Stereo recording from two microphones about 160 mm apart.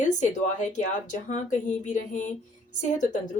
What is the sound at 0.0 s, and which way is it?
Speech, 50° left (ahead or behind).